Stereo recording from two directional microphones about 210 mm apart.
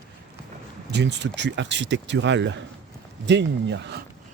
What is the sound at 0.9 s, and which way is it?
Speech, 55° right (ahead or behind).